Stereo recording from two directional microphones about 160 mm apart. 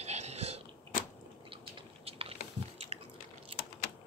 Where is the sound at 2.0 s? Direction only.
35° right (ahead or behind).